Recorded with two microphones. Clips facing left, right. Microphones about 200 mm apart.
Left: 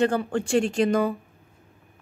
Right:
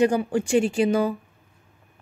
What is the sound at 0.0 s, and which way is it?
A woman's voice, 10° right (ahead or behind).